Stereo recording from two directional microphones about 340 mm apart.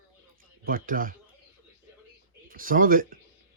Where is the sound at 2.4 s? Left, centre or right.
Right.